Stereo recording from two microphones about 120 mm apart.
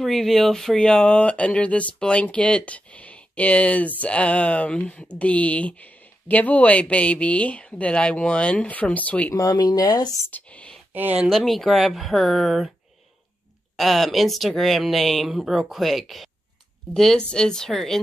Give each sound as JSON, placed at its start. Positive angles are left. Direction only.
{"t": 0.0, "sound": "speech", "side_deg": 5}
{"t": 9.3, "sound": "speech", "side_deg": 30}
{"t": 10.2, "sound": "speech", "side_deg": 10}
{"t": 10.9, "sound": "speech", "side_deg": -15}
{"t": 11.2, "sound": "speech", "side_deg": 0}
{"t": 13.7, "sound": "speech", "side_deg": 0}